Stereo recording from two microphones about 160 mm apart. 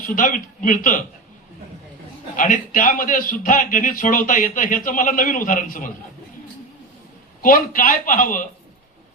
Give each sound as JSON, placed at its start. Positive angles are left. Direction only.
{"t": 0.1, "sound": "a man's voice", "side_deg": 55}
{"t": 2.3, "sound": "a man's voice", "side_deg": 55}
{"t": 7.4, "sound": "a man's voice", "side_deg": 60}